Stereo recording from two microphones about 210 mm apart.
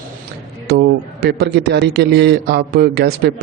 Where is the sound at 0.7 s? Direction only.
50° right (ahead or behind).